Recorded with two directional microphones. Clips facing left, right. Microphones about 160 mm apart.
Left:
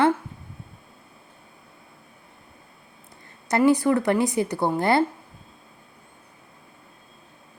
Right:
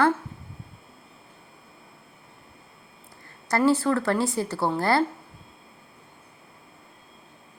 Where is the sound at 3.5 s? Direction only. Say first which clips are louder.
Left 3 dB; 15° left (ahead or behind).